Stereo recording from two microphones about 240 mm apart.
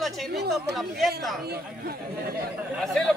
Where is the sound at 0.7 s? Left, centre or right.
Centre.